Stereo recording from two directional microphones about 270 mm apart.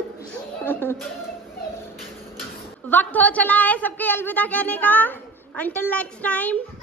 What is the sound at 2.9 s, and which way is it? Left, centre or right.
A woman's voice, centre.